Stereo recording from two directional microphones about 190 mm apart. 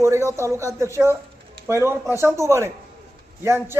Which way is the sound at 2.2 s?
15° right (ahead or behind).